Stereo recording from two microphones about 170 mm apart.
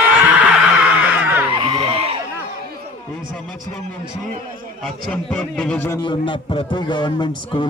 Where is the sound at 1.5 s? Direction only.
30° right (ahead or behind).